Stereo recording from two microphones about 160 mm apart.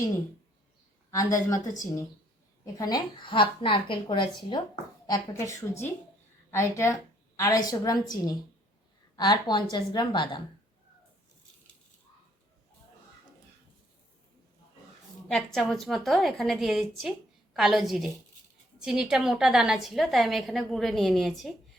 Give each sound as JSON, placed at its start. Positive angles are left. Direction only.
{"t": 1.1, "sound": "a woman's voice", "side_deg": 20}
{"t": 2.7, "sound": "a woman's voice", "side_deg": 25}
{"t": 15.3, "sound": "a woman's voice", "side_deg": 5}